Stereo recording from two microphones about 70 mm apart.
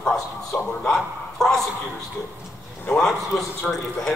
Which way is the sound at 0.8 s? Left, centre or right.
Centre.